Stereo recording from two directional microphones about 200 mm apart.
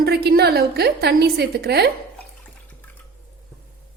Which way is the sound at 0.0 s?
50° right (ahead or behind).